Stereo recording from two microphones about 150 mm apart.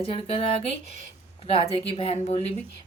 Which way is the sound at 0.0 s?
35° left (ahead or behind).